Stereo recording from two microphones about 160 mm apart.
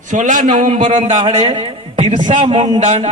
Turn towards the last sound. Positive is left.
turn(degrees=-40)  # may be behind; listen again after turning